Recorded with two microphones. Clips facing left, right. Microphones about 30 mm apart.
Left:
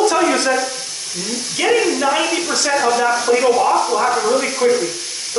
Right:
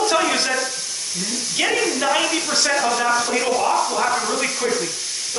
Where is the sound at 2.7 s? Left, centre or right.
Centre.